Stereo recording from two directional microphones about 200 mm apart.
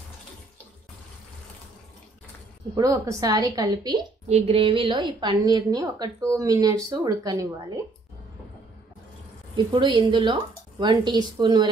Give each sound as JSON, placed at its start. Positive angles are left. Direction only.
{"t": 2.7, "sound": "a woman's voice", "side_deg": -15}
{"t": 4.3, "sound": "a woman's voice", "side_deg": -30}
{"t": 9.7, "sound": "a woman's voice", "side_deg": -25}